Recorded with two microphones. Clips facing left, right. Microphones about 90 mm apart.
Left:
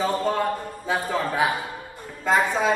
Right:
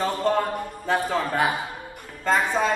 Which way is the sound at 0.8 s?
Centre (ahead or behind).